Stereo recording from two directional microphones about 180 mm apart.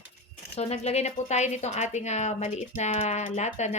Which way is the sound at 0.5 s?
35° left (ahead or behind).